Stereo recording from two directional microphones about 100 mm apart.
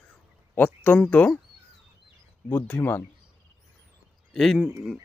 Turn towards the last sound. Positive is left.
turn(degrees=5)  # may be behind; listen again after turning